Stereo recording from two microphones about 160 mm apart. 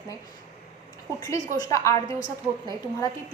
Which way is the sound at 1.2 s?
25° left (ahead or behind).